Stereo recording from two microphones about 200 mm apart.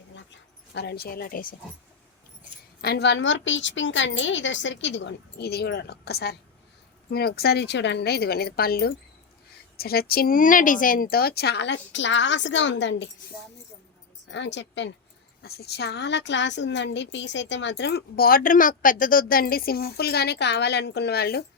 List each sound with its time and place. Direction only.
0.3 s speech: 60° left (ahead or behind); by 1.5 s 45° left (ahead or behind)
2.8 s a woman's voice: 55° left (ahead or behind)
14.3 s a woman's voice: 65° left (ahead or behind)